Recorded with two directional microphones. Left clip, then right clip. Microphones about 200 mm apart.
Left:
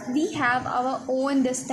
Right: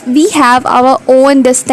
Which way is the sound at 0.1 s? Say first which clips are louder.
Right 17 dB; 50° right (ahead or behind).